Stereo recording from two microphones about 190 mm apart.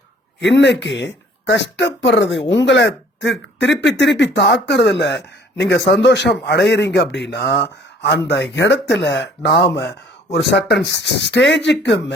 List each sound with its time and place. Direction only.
0.3 s speech: 70° left (ahead or behind)